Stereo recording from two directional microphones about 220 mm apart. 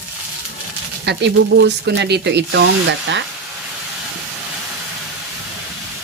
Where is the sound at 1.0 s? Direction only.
50° right (ahead or behind).